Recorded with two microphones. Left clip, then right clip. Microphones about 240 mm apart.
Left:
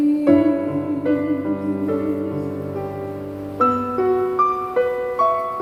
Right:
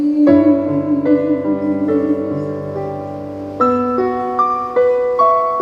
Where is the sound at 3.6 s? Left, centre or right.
Right.